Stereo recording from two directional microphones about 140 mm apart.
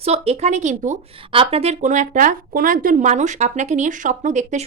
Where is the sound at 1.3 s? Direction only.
45° right (ahead or behind).